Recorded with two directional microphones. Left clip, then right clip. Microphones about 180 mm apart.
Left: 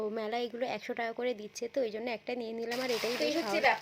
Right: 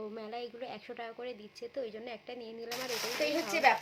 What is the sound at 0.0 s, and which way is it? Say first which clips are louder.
A woman's voice: left 7 dB; 50° left (ahead or behind).